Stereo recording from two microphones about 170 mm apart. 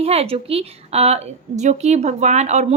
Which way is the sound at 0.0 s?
35° right (ahead or behind).